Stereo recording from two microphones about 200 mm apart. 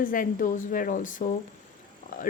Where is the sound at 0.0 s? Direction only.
45° left (ahead or behind).